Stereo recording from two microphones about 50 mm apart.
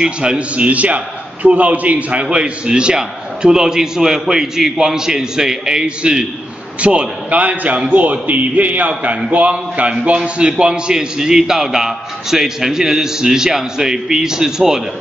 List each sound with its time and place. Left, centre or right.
0.0 s a man's voice: centre